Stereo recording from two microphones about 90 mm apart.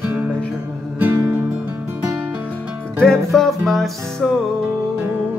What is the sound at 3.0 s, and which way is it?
Music, 5° left (ahead or behind).